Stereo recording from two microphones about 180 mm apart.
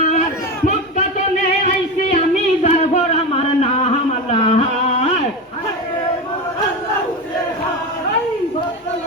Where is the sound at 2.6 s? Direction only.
40° left (ahead or behind).